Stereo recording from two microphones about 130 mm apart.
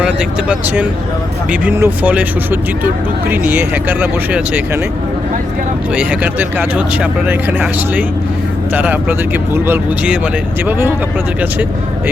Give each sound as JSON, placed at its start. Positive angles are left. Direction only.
{"t": 0.0, "sound": "speech", "side_deg": -5}
{"t": 5.9, "sound": "speech", "side_deg": -10}